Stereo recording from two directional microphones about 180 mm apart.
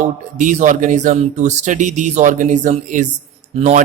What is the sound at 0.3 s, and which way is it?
Mantra, 45° right (ahead or behind).